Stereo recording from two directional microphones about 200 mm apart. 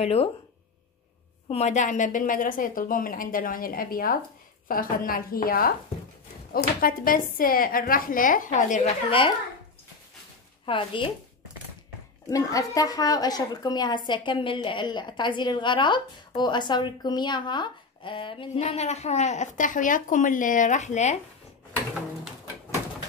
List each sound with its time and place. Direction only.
0.0 s speech: 30° left (ahead or behind)
1.5 s a woman's voice: 35° left (ahead or behind)
10.6 s a woman's voice: 25° left (ahead or behind)
12.3 s a woman's voice: 15° left (ahead or behind); by 21.2 s 35° left (ahead or behind)